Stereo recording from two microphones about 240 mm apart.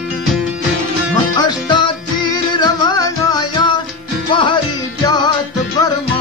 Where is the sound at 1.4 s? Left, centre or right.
Centre.